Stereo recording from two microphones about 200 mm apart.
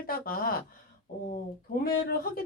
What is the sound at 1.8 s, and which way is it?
Speech, 50° left (ahead or behind).